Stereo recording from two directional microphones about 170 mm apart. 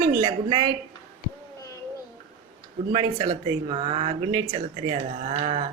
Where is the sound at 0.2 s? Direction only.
30° right (ahead or behind).